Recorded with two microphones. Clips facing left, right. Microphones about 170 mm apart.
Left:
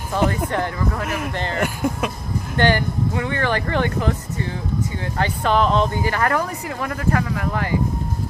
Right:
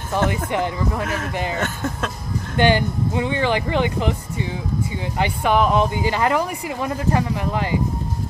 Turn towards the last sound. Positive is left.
turn(degrees=-20)  # may be behind; listen again after turning